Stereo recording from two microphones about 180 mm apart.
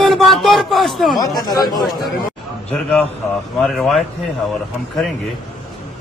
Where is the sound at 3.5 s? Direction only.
Centre (ahead or behind).